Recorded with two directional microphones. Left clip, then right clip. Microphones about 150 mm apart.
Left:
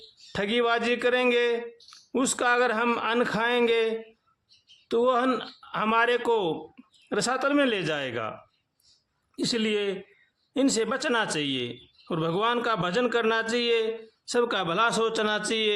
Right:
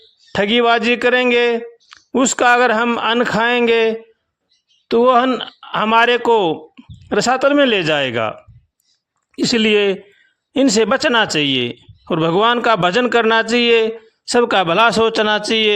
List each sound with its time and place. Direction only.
0.3 s a man's voice: 45° right (ahead or behind)